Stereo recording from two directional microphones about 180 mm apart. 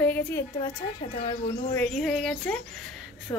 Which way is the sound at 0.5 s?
30° left (ahead or behind).